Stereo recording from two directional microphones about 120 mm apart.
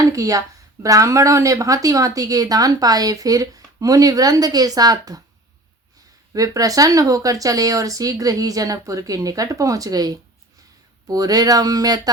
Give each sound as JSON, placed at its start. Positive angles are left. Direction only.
{"t": 0.1, "sound": "a woman's voice", "side_deg": -30}
{"t": 6.3, "sound": "a woman's voice", "side_deg": -30}